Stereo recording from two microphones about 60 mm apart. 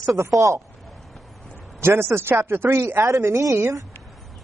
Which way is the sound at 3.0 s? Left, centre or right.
Right.